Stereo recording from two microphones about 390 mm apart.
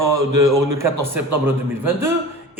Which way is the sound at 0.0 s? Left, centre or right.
Right.